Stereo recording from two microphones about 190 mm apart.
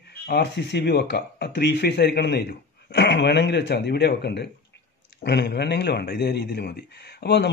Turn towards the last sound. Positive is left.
turn(degrees=60)  # may be behind; listen again after turning